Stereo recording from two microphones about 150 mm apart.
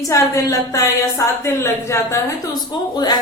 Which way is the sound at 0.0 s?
20° left (ahead or behind).